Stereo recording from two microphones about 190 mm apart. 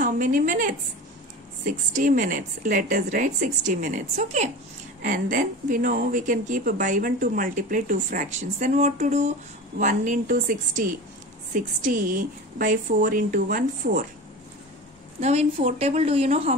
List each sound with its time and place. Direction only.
0.0 s speech: 45° right (ahead or behind)
15.1 s a woman's voice: 35° right (ahead or behind)